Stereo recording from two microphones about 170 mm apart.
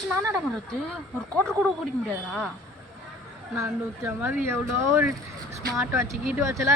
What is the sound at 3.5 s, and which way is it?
Speech, 15° right (ahead or behind).